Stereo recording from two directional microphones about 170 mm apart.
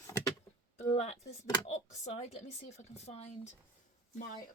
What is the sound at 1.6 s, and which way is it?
Speech, 40° left (ahead or behind).